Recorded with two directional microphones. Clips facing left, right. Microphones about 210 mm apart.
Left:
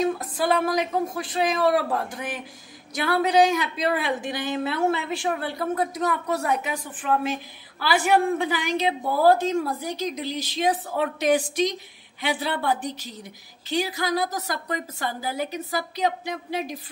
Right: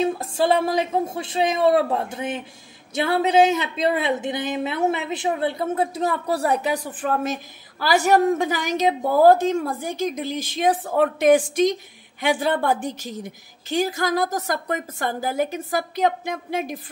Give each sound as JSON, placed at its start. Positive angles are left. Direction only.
{"t": 0.0, "sound": "a woman's voice", "side_deg": -25}